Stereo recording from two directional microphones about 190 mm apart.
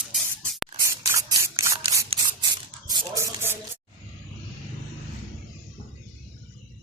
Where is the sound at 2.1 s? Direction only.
25° right (ahead or behind).